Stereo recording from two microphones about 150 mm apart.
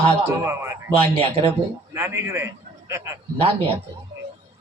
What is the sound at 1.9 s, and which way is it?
Speech, 15° right (ahead or behind).